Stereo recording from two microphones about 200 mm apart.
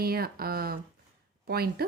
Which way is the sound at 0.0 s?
50° right (ahead or behind).